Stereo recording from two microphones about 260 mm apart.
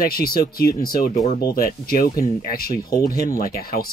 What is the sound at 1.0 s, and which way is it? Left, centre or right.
Speech, centre.